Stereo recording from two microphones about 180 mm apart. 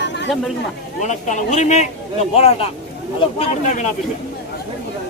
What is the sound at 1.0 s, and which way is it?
Speech, 40° left (ahead or behind).